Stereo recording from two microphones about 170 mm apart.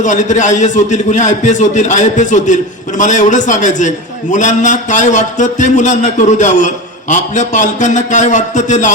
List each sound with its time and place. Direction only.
0.0 s a man's voice: 45° left (ahead or behind)